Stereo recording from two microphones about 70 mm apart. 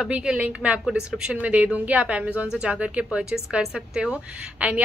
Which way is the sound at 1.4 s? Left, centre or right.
Centre.